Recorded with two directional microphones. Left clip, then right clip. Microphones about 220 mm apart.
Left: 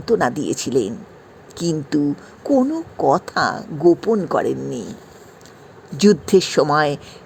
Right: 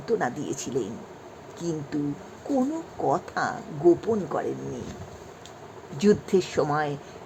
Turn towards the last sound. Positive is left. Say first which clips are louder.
# left 9 dB
turn(degrees=30)  # may be behind; listen again after turning